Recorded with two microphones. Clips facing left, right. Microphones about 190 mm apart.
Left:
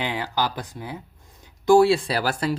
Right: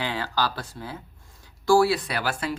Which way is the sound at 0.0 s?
15° left (ahead or behind).